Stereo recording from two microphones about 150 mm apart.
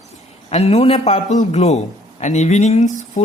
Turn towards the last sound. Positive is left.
turn(degrees=55)  # may be behind; listen again after turning